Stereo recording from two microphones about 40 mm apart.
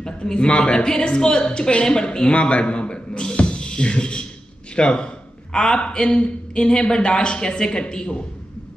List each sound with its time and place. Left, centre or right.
0.0 s a woman's voice: left